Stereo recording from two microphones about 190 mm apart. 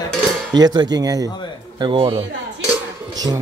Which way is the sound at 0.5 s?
20° right (ahead or behind).